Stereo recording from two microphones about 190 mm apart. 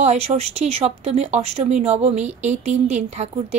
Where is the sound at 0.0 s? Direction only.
35° right (ahead or behind).